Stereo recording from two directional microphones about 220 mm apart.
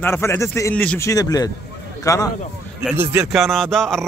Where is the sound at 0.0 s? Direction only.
10° left (ahead or behind).